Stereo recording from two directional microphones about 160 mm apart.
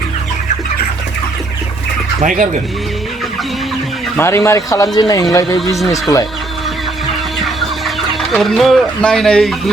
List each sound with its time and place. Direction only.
4.2 s speech: 15° left (ahead or behind)
5.5 s speech: centre (ahead or behind)
5.9 s speech: 20° left (ahead or behind)
7.4 s chicken: centre (ahead or behind)